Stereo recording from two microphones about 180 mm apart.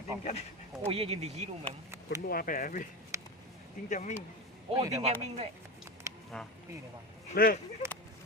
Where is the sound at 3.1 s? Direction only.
15° right (ahead or behind).